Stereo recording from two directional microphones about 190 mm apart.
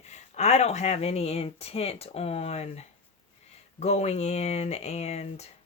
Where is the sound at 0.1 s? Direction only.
35° left (ahead or behind).